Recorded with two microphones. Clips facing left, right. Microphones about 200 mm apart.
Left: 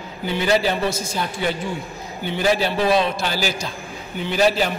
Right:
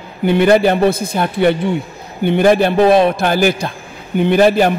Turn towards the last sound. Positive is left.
turn(degrees=-55)  # may be behind; listen again after turning